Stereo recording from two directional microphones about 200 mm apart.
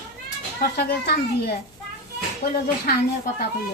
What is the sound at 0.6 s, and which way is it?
Speech, 50° left (ahead or behind).